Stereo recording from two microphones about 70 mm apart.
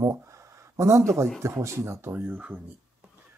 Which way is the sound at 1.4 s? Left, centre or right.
Right.